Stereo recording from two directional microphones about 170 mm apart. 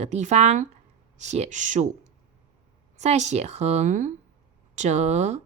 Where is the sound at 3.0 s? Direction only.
40° right (ahead or behind).